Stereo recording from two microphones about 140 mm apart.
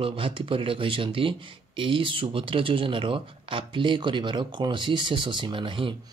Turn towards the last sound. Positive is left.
turn(degrees=-35)  # may be behind; listen again after turning